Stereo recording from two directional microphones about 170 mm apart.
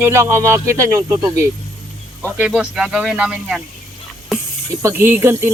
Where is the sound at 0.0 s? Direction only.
15° right (ahead or behind).